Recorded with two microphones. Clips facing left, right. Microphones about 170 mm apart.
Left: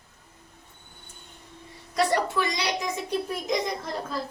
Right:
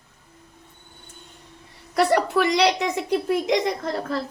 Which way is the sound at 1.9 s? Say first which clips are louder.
Right 5 dB; 65° right (ahead or behind).